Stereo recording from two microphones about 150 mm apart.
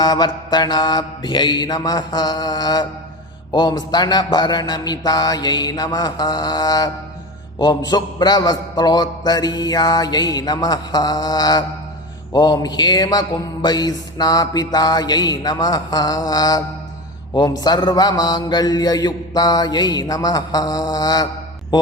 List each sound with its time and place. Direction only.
0.0 s music: 25° left (ahead or behind)